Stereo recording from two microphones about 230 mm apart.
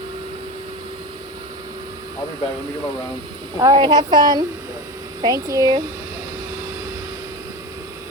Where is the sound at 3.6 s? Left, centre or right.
Centre.